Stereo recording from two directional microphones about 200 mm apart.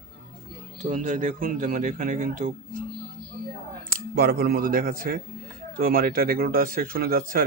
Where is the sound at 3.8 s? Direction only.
45° right (ahead or behind).